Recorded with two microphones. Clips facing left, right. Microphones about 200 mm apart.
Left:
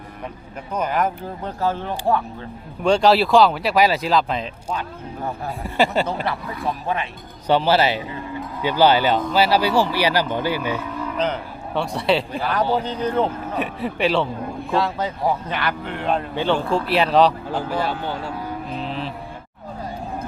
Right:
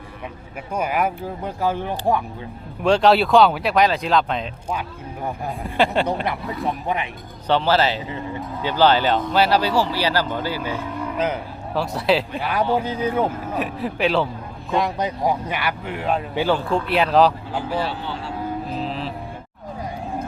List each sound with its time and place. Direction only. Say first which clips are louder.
0.7 s speech: even; 10° right (ahead or behind)
2.8 s speech: even; centre (ahead or behind)
5.7 s speech: even; 5° left (ahead or behind)
6.2 s speech: right 1 dB; 20° right (ahead or behind)
7.4 s speech: left 1 dB; 10° left (ahead or behind)
11.2 s speech: even; 5° right (ahead or behind)
14.8 s speech: right 1 dB; 15° right (ahead or behind)
17.7 s speech: left 1 dB; 45° left (ahead or behind)
18.8 s speech: right 1 dB; centre (ahead or behind)